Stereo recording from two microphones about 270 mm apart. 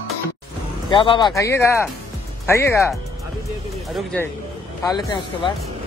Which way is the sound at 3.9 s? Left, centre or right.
Centre.